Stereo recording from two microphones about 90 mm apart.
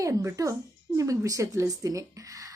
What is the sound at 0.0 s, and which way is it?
A child's voice, 35° right (ahead or behind).